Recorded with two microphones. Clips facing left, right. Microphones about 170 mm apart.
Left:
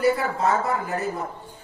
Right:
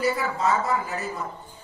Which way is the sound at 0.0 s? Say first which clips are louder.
Left 3 dB; 55° left (ahead or behind).